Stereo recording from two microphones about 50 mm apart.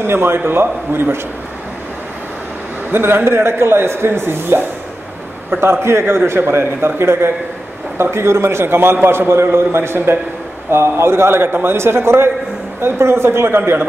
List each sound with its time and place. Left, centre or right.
0.0 s speech: right
2.9 s a man's voice: right